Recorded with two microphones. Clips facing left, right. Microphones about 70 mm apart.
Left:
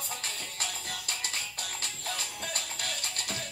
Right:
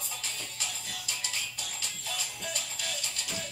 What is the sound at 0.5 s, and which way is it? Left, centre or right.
Music, left.